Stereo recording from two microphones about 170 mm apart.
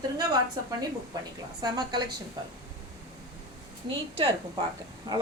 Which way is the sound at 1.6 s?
25° right (ahead or behind).